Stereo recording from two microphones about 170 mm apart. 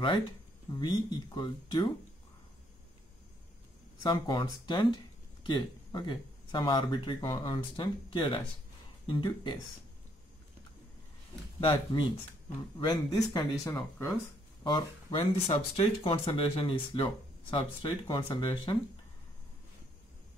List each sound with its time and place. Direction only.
0.7 s speech: 25° left (ahead or behind)
4.0 s speech: 25° left (ahead or behind)
11.6 s speech: 25° left (ahead or behind)
14.6 s speech: 25° left (ahead or behind)